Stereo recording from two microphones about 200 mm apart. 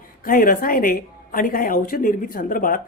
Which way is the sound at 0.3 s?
45° left (ahead or behind).